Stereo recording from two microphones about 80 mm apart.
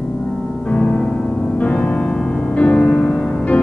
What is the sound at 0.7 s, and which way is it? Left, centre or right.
Music, centre.